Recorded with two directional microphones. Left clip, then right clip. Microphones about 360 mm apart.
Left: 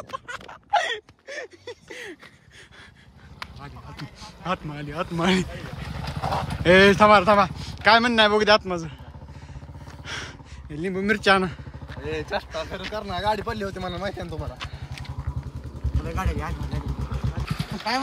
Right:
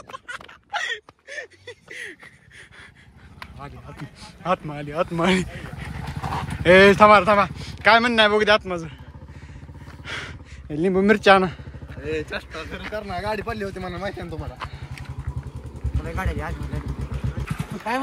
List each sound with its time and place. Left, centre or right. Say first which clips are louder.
0.1 s a sound: right 1 dB; centre
3.3 s speech: even; centre
10.0 s a sound: right 2 dB; centre
12.0 s speech: right 1 dB; left
12.9 s speech: left 2 dB; centre
16.0 s vehicle: right 1 dB; centre